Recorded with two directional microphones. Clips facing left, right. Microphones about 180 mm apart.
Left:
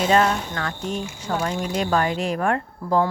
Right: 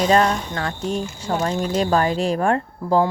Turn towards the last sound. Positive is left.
turn(degrees=-30)  # may be behind; listen again after turning